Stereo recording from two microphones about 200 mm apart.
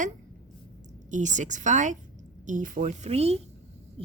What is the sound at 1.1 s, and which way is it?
Speech, 35° right (ahead or behind).